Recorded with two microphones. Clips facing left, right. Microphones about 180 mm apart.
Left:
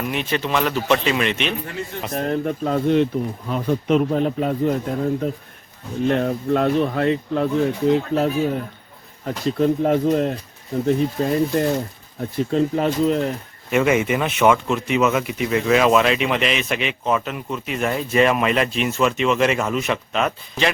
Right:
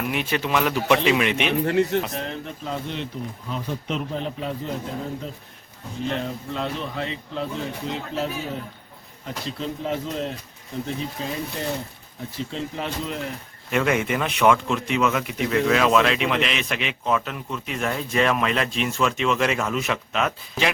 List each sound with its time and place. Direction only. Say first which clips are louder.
0.1 s speech: left 1 dB; 10° right (ahead or behind)
1.6 s speech: right 10 dB; 70° right (ahead or behind)
2.1 s a man's voice: left 9 dB; 50° left (ahead or behind)
13.7 s speech: left 4 dB; 5° left (ahead or behind)